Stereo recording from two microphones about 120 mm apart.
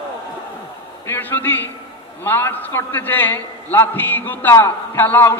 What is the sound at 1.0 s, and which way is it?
A man's voice, 15° left (ahead or behind).